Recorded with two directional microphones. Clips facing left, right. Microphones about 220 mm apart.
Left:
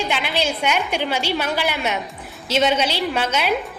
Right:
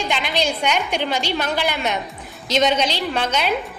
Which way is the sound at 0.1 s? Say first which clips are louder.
Right 1 dB; 5° left (ahead or behind).